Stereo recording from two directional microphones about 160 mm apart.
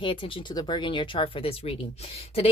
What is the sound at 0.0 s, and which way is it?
Speech, 35° left (ahead or behind).